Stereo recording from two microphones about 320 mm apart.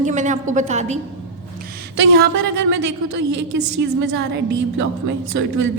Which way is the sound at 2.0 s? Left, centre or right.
Right.